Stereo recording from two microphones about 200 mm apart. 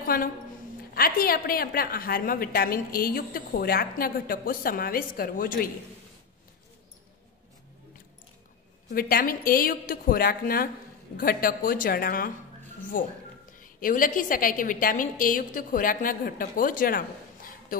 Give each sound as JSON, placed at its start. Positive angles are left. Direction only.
{"t": 0.0, "sound": "a sound", "side_deg": 45}
{"t": 0.9, "sound": "a woman's voice", "side_deg": 45}
{"t": 8.9, "sound": "a woman's voice", "side_deg": 45}